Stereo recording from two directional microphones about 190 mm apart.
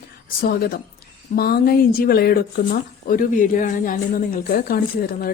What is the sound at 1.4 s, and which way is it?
A woman's voice, 55° left (ahead or behind).